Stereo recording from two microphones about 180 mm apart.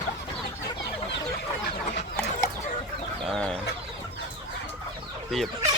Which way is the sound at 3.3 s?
5° left (ahead or behind).